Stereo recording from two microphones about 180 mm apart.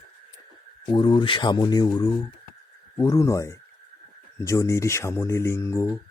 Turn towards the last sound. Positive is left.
turn(degrees=15)  # may be behind; listen again after turning